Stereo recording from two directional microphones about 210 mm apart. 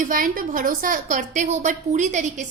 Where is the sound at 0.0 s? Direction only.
40° right (ahead or behind).